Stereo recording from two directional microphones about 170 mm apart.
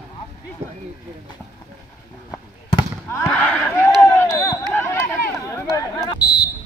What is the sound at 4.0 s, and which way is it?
Run, 15° left (ahead or behind).